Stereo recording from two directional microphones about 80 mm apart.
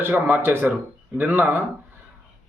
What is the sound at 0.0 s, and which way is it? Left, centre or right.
A man's voice, right.